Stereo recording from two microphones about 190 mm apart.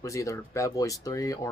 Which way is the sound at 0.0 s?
15° left (ahead or behind).